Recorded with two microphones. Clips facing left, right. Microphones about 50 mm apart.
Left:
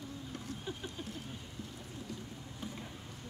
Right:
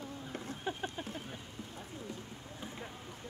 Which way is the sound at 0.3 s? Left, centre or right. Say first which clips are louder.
Right 5 dB; right.